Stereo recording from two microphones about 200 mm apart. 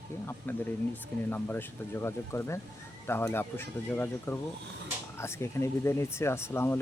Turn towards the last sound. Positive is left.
turn(degrees=10)  # may be behind; listen again after turning